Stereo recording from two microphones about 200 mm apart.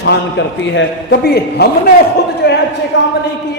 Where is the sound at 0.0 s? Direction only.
60° left (ahead or behind).